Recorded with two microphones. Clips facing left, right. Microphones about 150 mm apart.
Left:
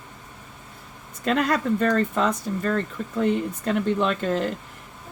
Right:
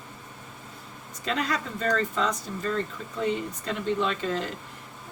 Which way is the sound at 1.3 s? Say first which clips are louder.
Left 7 dB; 55° left (ahead or behind).